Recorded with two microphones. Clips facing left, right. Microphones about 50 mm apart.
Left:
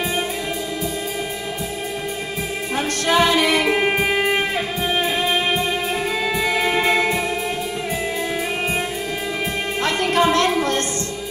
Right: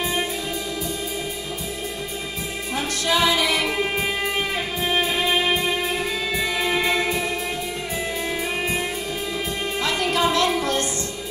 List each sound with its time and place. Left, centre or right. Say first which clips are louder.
2.7 s music: left 3 dB; left
4.2 s music: left 5 dB; left
9.8 s music: left 4 dB; left